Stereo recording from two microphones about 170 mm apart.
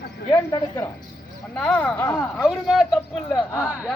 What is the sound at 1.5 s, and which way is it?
Speech, 5° left (ahead or behind).